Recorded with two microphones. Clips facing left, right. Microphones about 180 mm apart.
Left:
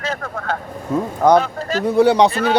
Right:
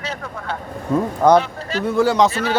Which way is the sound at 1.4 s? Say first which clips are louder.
Left 3 dB; 45° left (ahead or behind).